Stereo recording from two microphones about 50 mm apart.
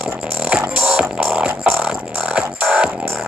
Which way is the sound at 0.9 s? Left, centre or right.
Right.